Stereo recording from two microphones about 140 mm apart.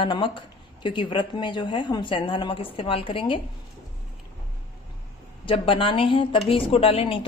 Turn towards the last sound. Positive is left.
turn(degrees=40)  # may be behind; listen again after turning